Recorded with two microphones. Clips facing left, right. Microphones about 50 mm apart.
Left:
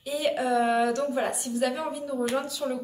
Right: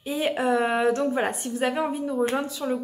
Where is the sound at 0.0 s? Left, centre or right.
Right.